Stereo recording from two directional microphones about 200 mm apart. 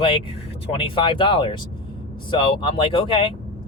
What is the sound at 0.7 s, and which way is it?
Speech, 25° left (ahead or behind).